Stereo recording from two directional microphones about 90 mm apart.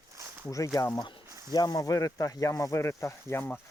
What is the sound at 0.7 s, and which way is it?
Speech, 40° left (ahead or behind).